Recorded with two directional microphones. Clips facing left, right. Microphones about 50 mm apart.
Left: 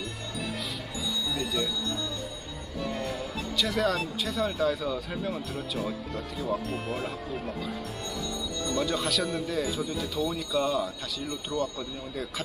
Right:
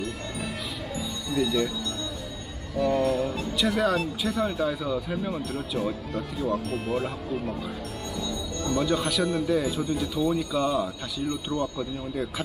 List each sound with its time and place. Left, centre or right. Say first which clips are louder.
1.3 s speech: right 11 dB; centre
2.8 s speech: right 10 dB; centre
3.5 s speech: right 2 dB; right
3.8 s speech: right 3 dB; centre
8.6 s speech: right 4 dB; centre